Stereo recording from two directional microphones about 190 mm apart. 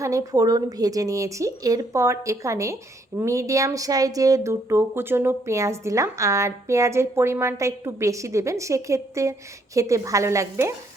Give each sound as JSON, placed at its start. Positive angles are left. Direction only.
{"t": 0.0, "sound": "speech", "side_deg": -15}